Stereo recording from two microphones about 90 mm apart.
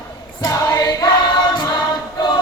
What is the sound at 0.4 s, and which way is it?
Choir, 45° left (ahead or behind).